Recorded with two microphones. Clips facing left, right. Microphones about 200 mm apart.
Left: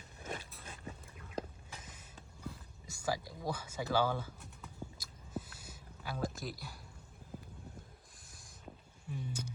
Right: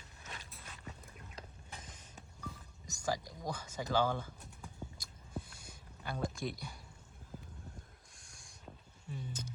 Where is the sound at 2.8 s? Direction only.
10° left (ahead or behind).